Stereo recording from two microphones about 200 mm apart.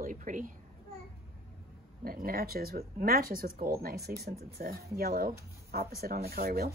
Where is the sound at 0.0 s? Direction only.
40° right (ahead or behind).